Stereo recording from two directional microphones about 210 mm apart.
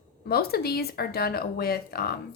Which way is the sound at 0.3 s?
45° left (ahead or behind).